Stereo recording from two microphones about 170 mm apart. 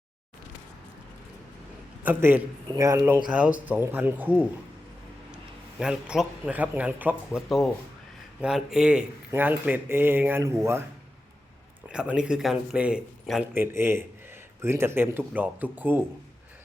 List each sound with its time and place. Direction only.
2.0 s speech: 10° right (ahead or behind)
5.8 s speech: 5° right (ahead or behind)
11.9 s speech: 5° right (ahead or behind)